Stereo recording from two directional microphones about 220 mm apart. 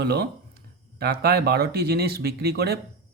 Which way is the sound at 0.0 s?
50° right (ahead or behind).